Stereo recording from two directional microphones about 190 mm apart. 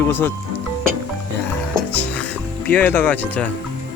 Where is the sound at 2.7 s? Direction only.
10° left (ahead or behind).